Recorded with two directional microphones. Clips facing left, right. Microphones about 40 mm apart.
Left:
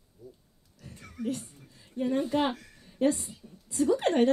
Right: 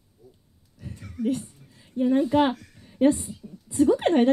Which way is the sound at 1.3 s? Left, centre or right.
Centre.